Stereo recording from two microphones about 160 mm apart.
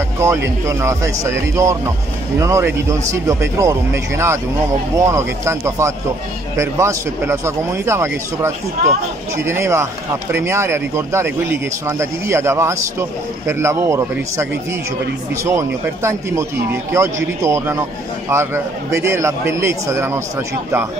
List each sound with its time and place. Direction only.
0.2 s speech: 15° right (ahead or behind)